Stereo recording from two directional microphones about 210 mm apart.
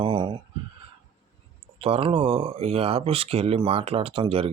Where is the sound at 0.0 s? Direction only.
25° right (ahead or behind).